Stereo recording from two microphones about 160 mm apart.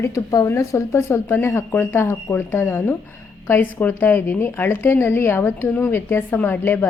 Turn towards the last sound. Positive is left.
turn(degrees=10)  # may be behind; listen again after turning